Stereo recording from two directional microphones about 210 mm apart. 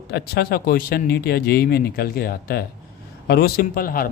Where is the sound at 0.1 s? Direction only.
50° left (ahead or behind).